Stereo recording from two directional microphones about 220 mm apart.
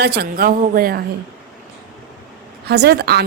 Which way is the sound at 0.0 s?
45° right (ahead or behind).